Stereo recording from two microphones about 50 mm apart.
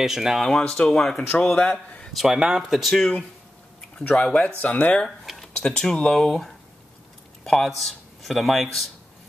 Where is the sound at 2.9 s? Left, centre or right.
Centre.